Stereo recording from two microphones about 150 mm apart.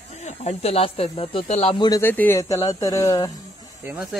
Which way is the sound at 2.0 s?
15° left (ahead or behind).